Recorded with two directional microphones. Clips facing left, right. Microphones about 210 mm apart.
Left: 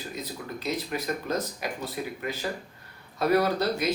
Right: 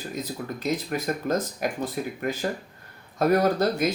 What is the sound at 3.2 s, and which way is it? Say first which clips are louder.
Speech: right 3 dB; 50° right (ahead or behind).